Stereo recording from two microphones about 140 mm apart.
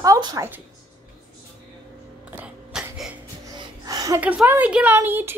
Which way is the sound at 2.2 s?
10° right (ahead or behind).